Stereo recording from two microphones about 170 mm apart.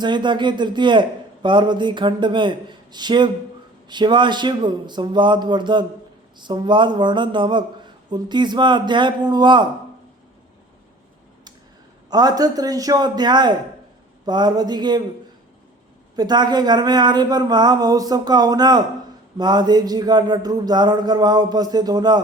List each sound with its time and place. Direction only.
0.0 s a man's voice: 25° right (ahead or behind)
12.1 s a man's voice: 20° right (ahead or behind)
16.1 s a man's voice: 25° right (ahead or behind)